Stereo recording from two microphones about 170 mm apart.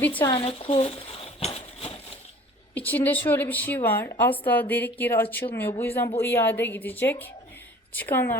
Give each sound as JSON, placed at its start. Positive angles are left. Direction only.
{"t": 0.3, "sound": "speech", "side_deg": 30}
{"t": 1.5, "sound": "a sound", "side_deg": 35}
{"t": 2.7, "sound": "a woman's voice", "side_deg": 10}